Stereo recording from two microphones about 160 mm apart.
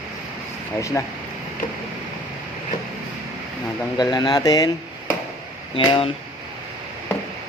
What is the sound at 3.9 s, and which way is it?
Speech, 25° left (ahead or behind).